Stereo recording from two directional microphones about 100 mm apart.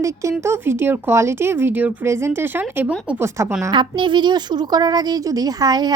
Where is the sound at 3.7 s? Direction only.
55° right (ahead or behind).